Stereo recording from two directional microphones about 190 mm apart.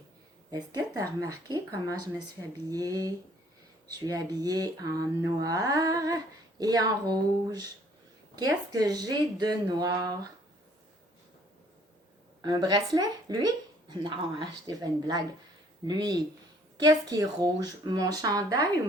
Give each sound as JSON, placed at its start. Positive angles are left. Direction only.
{"t": 0.5, "sound": "speech", "side_deg": -20}
{"t": 12.4, "sound": "speech", "side_deg": -20}